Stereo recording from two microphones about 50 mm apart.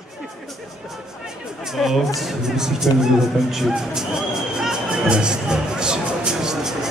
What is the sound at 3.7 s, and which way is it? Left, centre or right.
Music, centre.